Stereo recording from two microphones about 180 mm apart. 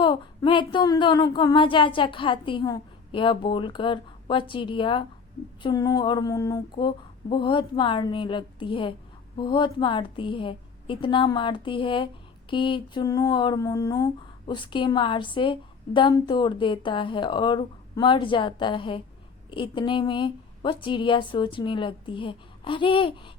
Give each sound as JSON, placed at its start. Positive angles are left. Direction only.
{"t": 0.0, "sound": "speech", "side_deg": 30}